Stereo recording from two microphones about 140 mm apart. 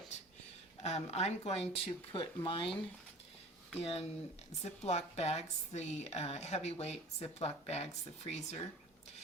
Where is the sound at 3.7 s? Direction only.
45° left (ahead or behind).